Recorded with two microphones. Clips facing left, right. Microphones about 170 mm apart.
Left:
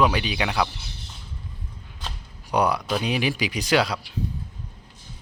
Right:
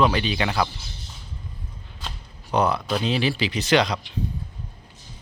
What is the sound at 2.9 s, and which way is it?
Speech, 10° left (ahead or behind).